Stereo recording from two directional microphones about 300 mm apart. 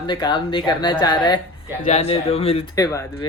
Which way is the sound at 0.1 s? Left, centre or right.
Centre.